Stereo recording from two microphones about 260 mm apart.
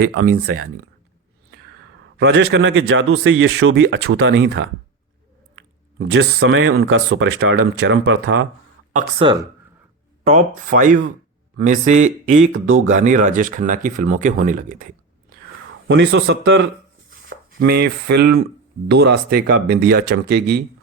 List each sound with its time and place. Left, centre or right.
0.0 s speech: right
2.1 s speech: right
8.9 s speech: right
10.2 s speech: right
15.9 s speech: right
17.2 s chopping: right
18.9 s speech: right